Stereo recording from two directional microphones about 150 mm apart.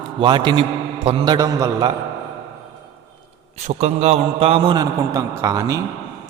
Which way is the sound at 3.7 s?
45° right (ahead or behind).